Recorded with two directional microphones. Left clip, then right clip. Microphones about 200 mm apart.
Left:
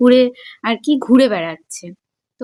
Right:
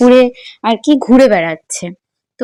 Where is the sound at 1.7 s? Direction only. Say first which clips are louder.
Right 10 dB; 40° right (ahead or behind).